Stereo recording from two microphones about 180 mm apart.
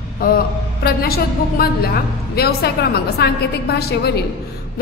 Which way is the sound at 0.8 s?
55° left (ahead or behind).